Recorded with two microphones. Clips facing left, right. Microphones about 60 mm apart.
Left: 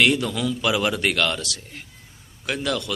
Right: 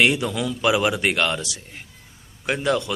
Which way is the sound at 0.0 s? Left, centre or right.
Centre.